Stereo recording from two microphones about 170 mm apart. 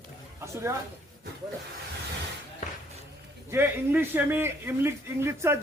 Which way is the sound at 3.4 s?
15° right (ahead or behind).